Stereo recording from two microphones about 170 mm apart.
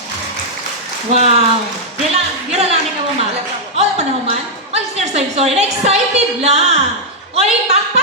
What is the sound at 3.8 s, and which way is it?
A woman's voice, 40° right (ahead or behind).